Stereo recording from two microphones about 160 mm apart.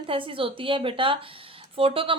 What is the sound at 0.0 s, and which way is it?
A woman's voice, 30° right (ahead or behind).